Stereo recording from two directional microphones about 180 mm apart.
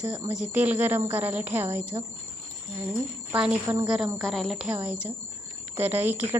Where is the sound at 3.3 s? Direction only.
10° right (ahead or behind).